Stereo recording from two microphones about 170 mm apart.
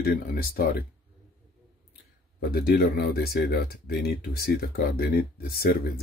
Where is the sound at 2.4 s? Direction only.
65° left (ahead or behind).